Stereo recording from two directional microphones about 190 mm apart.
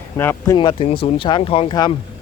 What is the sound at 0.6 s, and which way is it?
Speech, 25° left (ahead or behind).